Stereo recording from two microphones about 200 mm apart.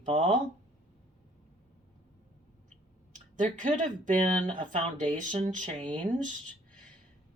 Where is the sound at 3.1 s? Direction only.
40° right (ahead or behind).